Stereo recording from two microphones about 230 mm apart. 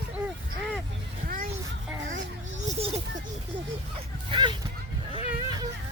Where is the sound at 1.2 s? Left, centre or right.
Right.